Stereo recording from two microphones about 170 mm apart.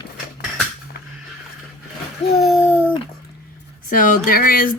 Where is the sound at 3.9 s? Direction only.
55° left (ahead or behind).